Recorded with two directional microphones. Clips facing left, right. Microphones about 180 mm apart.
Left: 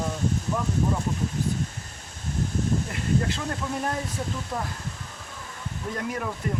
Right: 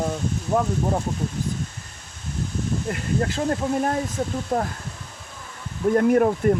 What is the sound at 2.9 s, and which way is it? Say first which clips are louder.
Speech: right 2 dB; 50° right (ahead or behind).